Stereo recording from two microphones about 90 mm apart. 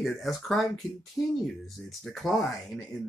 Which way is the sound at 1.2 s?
30° left (ahead or behind).